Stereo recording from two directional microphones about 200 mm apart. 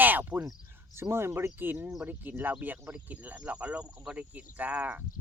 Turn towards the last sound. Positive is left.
turn(degrees=-10)  # may be behind; listen again after turning